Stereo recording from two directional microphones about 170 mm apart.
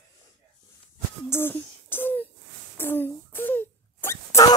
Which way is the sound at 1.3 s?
15° left (ahead or behind).